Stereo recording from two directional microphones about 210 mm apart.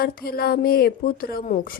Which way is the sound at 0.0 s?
45° left (ahead or behind).